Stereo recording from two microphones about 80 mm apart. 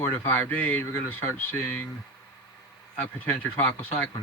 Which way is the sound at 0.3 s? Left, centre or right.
Centre.